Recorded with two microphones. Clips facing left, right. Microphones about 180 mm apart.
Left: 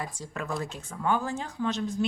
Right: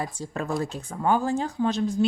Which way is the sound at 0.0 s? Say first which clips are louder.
Right 5 dB; 30° right (ahead or behind).